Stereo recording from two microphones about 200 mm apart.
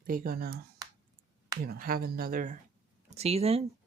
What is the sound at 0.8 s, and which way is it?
Clicking, 20° right (ahead or behind).